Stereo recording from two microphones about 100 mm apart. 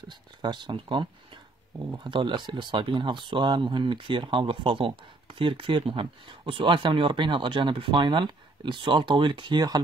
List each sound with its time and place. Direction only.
0.4 s speech: 50° right (ahead or behind)
2.0 s speech: 50° right (ahead or behind)